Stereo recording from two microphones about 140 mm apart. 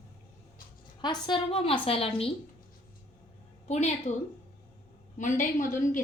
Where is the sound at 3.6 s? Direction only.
55° left (ahead or behind).